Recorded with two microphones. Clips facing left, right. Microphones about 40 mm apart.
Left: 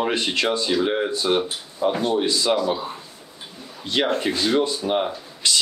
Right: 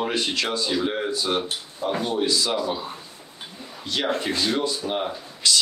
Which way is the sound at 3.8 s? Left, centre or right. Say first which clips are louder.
Left 3 dB; left.